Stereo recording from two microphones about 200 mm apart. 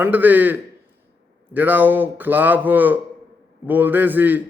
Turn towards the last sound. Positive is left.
turn(degrees=-10)  # may be behind; listen again after turning